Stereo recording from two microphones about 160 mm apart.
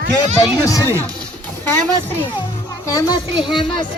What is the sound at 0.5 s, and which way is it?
Speech, 20° left (ahead or behind).